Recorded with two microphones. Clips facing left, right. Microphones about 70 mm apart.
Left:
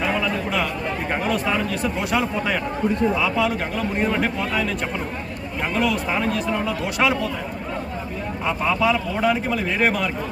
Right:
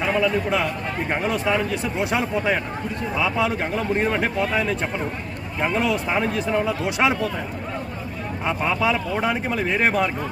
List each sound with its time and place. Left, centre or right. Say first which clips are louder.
1.1 s speech: right 1 dB; centre
8.4 s speech: left 1 dB; right